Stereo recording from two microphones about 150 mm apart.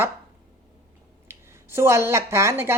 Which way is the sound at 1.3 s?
15° right (ahead or behind).